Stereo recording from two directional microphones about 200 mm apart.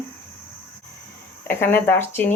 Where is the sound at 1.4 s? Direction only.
10° left (ahead or behind).